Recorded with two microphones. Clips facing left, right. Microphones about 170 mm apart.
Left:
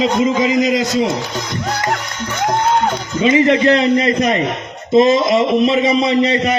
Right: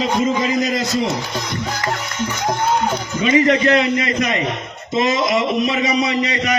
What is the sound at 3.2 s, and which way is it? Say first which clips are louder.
A man's voice: left 3 dB; 25° left (ahead or behind).